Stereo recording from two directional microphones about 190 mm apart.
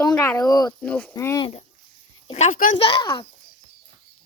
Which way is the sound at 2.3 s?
35° left (ahead or behind).